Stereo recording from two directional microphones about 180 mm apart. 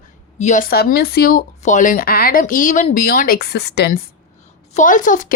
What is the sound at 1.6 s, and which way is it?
Speech, 45° left (ahead or behind).